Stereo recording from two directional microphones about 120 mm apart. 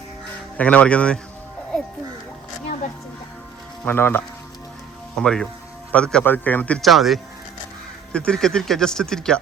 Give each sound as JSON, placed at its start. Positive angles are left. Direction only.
{"t": 0.5, "sound": "speech", "side_deg": 10}
{"t": 3.8, "sound": "speech", "side_deg": 20}
{"t": 5.1, "sound": "speech", "side_deg": 5}
{"t": 6.8, "sound": "speech", "side_deg": 0}